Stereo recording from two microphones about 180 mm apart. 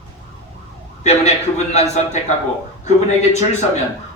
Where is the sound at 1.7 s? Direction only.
40° left (ahead or behind).